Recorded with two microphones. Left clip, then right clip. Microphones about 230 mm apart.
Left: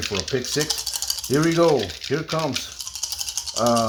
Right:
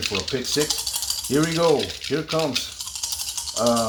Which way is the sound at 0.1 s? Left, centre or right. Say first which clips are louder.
Even; left.